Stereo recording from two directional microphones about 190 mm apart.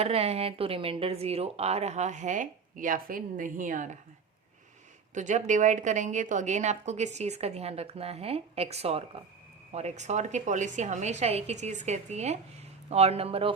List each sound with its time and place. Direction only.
0.0 s a woman's voice: 30° right (ahead or behind)
5.1 s a woman's voice: 40° right (ahead or behind)